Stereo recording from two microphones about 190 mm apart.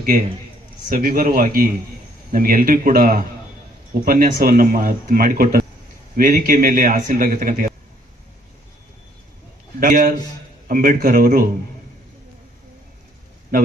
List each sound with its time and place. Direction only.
0.9 s speech: 50° right (ahead or behind)
9.8 s speech: 45° right (ahead or behind)